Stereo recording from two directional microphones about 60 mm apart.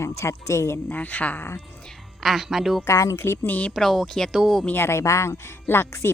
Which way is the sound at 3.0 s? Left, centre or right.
Left.